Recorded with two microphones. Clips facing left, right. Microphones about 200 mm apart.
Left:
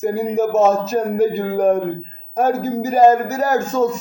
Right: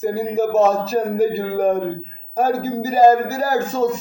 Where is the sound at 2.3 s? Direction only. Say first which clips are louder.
Left 1 dB; 35° right (ahead or behind).